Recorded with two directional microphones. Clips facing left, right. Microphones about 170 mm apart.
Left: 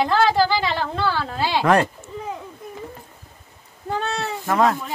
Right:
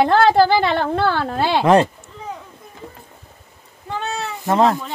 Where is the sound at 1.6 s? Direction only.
20° right (ahead or behind).